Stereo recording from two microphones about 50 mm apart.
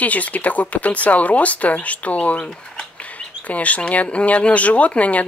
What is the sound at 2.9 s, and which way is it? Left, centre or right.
Speech, left.